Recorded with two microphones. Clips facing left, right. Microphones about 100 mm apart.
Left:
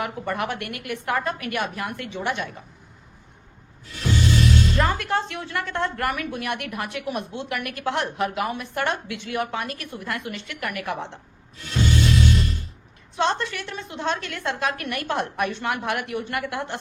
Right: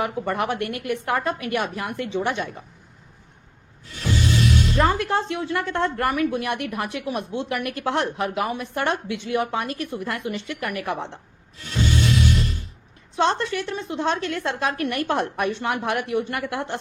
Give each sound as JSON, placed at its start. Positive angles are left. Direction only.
{"t": 0.0, "sound": "a woman's voice", "side_deg": -30}
{"t": 4.8, "sound": "a woman's voice", "side_deg": -30}
{"t": 12.1, "sound": "music", "side_deg": 0}
{"t": 13.1, "sound": "a woman's voice", "side_deg": -30}